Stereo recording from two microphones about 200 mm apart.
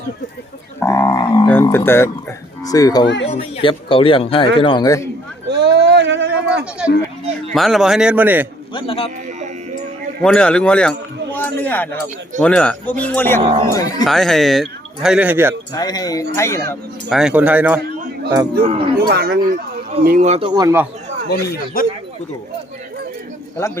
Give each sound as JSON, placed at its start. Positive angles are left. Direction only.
{"t": 0.8, "sound": "speech", "side_deg": 15}
{"t": 1.5, "sound": "speech", "side_deg": 10}
{"t": 5.5, "sound": "a sound", "side_deg": -55}
{"t": 7.5, "sound": "speech", "side_deg": 0}
{"t": 8.7, "sound": "speech", "side_deg": 30}
{"t": 10.2, "sound": "a man's voice", "side_deg": 5}
{"t": 13.4, "sound": "speech", "side_deg": -25}
{"t": 13.7, "sound": "speech", "side_deg": 15}
{"t": 14.0, "sound": "speech", "side_deg": 0}
{"t": 15.7, "sound": "speech", "side_deg": 20}
{"t": 17.1, "sound": "a man's voice", "side_deg": -5}
{"t": 18.9, "sound": "speech", "side_deg": -55}
{"t": 21.2, "sound": "a man's voice", "side_deg": 50}